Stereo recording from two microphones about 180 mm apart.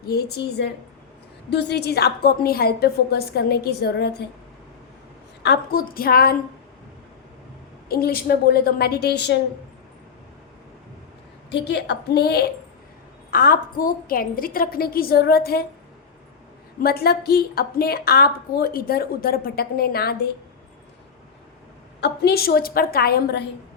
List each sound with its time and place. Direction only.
0.0 s a woman's voice: 60° left (ahead or behind)
5.4 s a woman's voice: 60° left (ahead or behind)
7.9 s a woman's voice: 60° left (ahead or behind)
11.5 s a woman's voice: 70° left (ahead or behind)
13.3 s a woman's voice: 55° left (ahead or behind)
16.8 s a woman's voice: 60° left (ahead or behind)
22.0 s a woman's voice: 60° left (ahead or behind)